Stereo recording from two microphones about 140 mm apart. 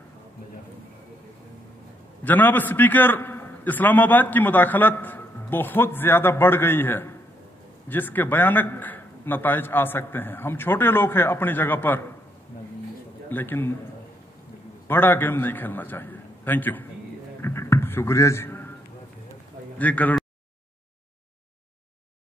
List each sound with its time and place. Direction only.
2.2 s a man's voice: 15° left (ahead or behind)
13.3 s a man's voice: 15° left (ahead or behind)
14.9 s a man's voice: 15° left (ahead or behind)
17.4 s a sound: 20° left (ahead or behind)
19.8 s a man's voice: 10° left (ahead or behind)